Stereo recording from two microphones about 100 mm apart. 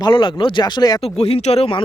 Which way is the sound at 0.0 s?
55° left (ahead or behind).